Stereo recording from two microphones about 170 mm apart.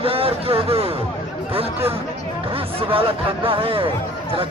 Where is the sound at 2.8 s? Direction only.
30° right (ahead or behind).